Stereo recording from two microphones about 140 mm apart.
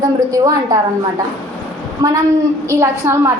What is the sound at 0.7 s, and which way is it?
Speech, 25° right (ahead or behind).